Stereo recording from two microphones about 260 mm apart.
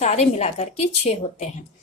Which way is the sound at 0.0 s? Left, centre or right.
Left.